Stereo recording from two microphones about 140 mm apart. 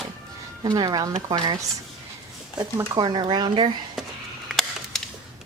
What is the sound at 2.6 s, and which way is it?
Speech, 30° right (ahead or behind).